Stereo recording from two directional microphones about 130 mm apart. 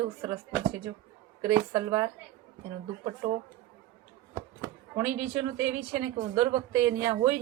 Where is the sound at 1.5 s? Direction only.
35° right (ahead or behind).